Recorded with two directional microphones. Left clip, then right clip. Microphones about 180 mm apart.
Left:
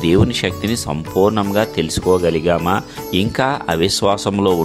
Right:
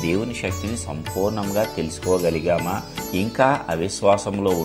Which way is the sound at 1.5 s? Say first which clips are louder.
Left 6 dB; 50° left (ahead or behind).